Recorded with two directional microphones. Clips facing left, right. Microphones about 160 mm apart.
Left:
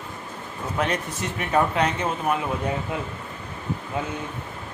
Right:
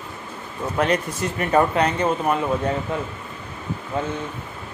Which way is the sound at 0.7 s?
Centre (ahead or behind).